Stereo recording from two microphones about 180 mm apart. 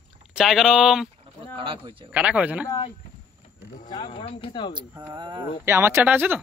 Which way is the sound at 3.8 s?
25° left (ahead or behind).